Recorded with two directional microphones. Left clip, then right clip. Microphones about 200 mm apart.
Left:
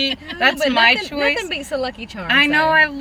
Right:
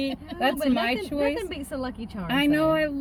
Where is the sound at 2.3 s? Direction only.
15° right (ahead or behind).